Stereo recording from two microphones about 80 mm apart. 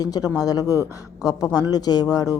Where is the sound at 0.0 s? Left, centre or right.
Left.